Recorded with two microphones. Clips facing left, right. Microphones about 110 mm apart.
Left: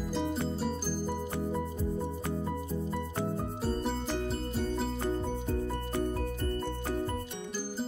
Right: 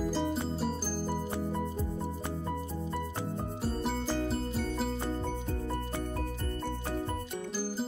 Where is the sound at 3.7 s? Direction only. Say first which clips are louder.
Right 1 dB; 5° right (ahead or behind).